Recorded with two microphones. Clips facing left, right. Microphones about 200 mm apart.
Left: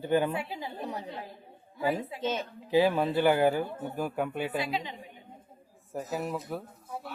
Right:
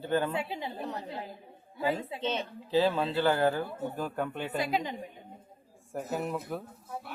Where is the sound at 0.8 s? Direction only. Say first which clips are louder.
Even; 10° left (ahead or behind).